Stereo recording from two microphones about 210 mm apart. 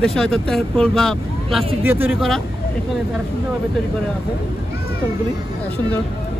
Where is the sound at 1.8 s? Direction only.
10° right (ahead or behind).